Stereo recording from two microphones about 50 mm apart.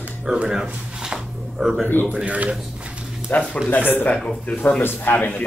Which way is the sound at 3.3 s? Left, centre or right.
Left.